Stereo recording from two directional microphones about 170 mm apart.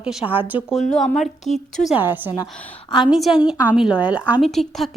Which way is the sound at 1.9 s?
10° right (ahead or behind).